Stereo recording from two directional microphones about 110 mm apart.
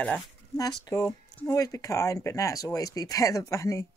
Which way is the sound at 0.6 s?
35° left (ahead or behind).